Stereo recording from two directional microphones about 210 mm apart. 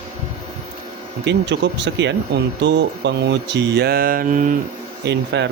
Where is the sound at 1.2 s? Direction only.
55° right (ahead or behind); by 4.5 s 40° right (ahead or behind).